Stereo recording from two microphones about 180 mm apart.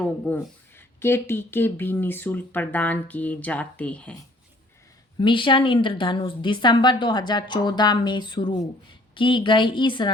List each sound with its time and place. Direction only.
0.0 s speech: 10° left (ahead or behind)
5.2 s a woman's voice: 25° left (ahead or behind)